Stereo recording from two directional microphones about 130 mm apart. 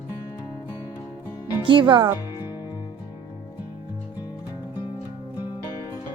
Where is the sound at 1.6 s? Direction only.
40° right (ahead or behind).